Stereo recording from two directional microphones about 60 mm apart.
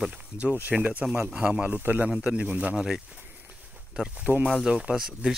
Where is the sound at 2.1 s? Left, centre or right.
Centre.